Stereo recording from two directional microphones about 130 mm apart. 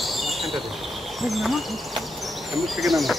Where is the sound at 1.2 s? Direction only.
Centre (ahead or behind).